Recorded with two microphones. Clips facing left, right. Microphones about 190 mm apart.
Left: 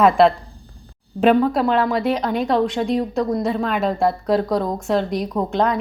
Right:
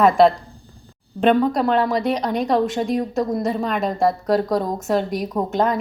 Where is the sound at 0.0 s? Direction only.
Centre (ahead or behind).